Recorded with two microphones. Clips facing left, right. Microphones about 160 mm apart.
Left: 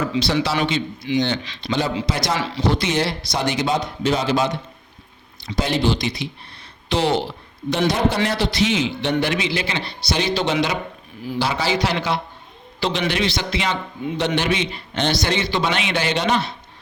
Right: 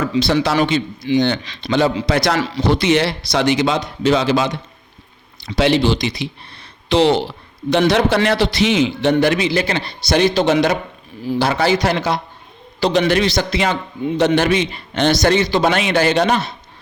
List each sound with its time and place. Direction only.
0.2 s a man's voice: 50° right (ahead or behind)
1.2 s a man's voice: 55° right (ahead or behind); by 4.5 s 90° right
5.4 s a man's voice: 80° right
9.0 s a man's voice: 45° right (ahead or behind)